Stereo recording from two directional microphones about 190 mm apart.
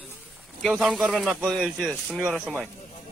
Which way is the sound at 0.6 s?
Centre (ahead or behind).